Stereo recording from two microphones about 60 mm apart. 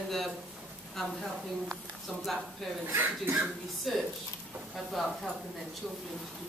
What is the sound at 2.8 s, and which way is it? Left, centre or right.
Speech, right.